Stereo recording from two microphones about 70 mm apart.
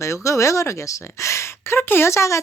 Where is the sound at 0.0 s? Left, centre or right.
Left.